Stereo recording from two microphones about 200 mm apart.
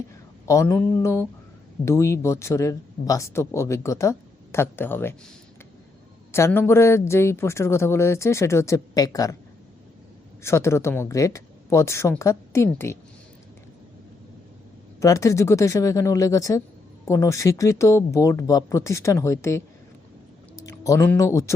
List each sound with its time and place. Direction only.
0.4 s speech: 15° left (ahead or behind)
6.3 s speech: 10° left (ahead or behind)
10.4 s speech: 15° left (ahead or behind)
15.0 s speech: 15° left (ahead or behind)